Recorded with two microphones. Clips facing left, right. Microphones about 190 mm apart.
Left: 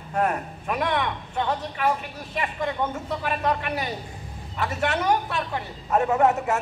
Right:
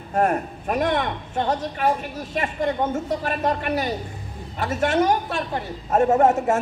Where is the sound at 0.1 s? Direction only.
45° right (ahead or behind).